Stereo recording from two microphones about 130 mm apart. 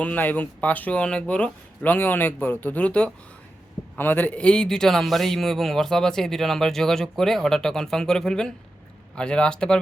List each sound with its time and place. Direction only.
0.0 s a man's voice: 10° left (ahead or behind)